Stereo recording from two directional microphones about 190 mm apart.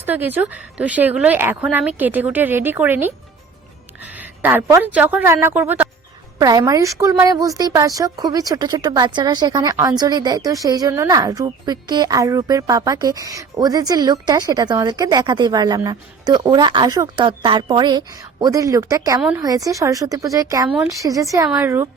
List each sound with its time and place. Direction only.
0.0 s a woman's voice: 10° right (ahead or behind)
20.7 s a woman's voice: 5° right (ahead or behind)
21.0 s speech: 15° right (ahead or behind)